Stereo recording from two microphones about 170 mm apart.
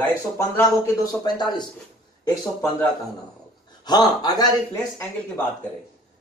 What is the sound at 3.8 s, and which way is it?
Speech, 25° left (ahead or behind).